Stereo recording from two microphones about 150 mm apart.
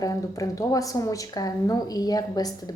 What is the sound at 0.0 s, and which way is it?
A woman's voice, 25° left (ahead or behind).